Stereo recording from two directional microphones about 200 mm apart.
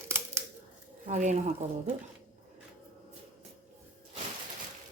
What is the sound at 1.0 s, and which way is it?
Speech, 35° right (ahead or behind).